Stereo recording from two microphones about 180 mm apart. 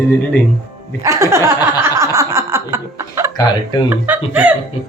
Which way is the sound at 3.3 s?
25° left (ahead or behind).